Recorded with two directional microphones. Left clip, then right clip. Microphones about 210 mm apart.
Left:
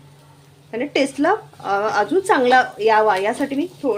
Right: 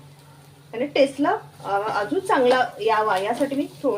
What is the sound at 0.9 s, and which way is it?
A woman's voice, 50° left (ahead or behind).